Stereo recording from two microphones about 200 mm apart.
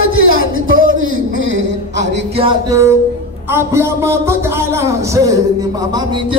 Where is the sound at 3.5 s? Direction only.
15° right (ahead or behind).